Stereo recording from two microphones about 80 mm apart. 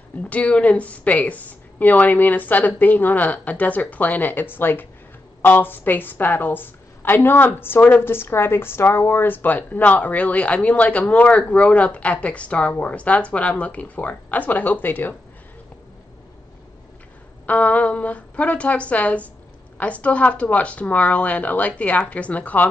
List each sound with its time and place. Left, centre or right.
0.2 s a woman's voice: centre
17.5 s a woman's voice: centre